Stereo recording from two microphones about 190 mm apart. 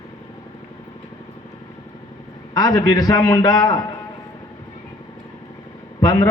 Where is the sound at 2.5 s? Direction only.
20° left (ahead or behind).